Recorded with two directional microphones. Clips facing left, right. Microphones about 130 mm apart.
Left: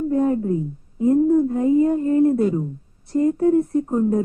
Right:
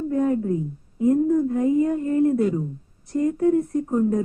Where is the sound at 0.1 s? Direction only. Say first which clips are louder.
Left 1 dB; 30° left (ahead or behind).